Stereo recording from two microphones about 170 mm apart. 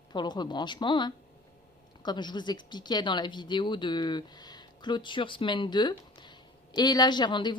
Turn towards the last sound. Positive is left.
turn(degrees=25)  # may be behind; listen again after turning